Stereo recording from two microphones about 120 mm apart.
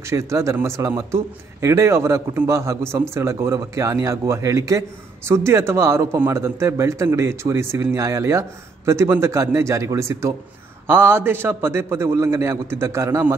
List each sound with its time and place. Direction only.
0.0 s a man's voice: 25° right (ahead or behind)